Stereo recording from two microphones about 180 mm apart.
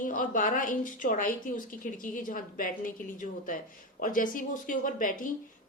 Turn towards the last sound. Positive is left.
turn(degrees=45)  # may be behind; listen again after turning